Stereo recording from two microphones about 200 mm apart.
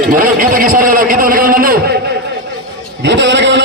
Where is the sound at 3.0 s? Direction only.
60° right (ahead or behind).